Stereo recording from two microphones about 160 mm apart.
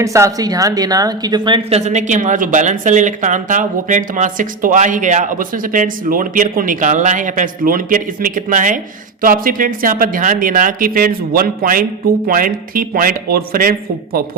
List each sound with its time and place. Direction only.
0.0 s a woman's voice: 20° right (ahead or behind)
1.8 s speech: 50° right (ahead or behind); by 14.3 s 65° right (ahead or behind)